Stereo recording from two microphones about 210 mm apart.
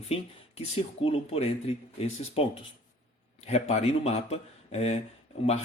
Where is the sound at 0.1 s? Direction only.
30° left (ahead or behind).